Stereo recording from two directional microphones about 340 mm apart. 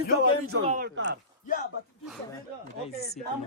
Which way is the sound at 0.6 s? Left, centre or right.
Right.